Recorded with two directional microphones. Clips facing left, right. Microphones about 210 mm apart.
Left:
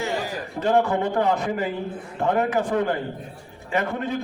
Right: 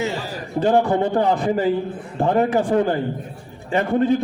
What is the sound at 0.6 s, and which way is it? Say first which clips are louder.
A man's voice: right 3 dB; 30° right (ahead or behind).